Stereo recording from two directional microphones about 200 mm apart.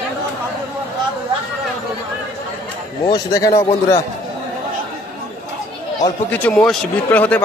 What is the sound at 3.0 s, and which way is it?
A man's voice, 20° left (ahead or behind).